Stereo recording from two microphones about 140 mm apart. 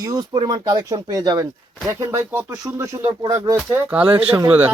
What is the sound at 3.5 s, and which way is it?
Speech, 10° right (ahead or behind).